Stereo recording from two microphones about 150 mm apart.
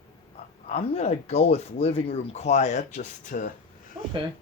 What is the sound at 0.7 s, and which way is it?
Speech, 45° left (ahead or behind).